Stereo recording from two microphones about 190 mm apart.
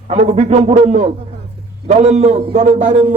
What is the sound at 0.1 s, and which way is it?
A man's voice, 35° right (ahead or behind).